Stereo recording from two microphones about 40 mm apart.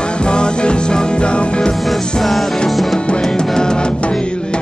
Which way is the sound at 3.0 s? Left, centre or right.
Left.